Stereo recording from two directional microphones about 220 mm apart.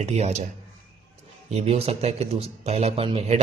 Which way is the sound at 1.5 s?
30° right (ahead or behind).